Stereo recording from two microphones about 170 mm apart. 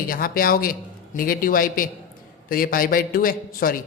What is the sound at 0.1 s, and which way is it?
A man's voice, 60° left (ahead or behind).